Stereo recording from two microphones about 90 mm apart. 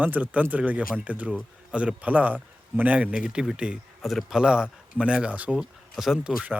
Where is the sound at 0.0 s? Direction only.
20° right (ahead or behind).